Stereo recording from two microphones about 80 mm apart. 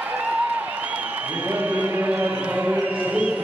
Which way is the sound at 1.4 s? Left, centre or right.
Right.